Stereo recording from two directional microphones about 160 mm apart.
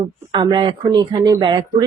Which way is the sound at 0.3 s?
30° right (ahead or behind).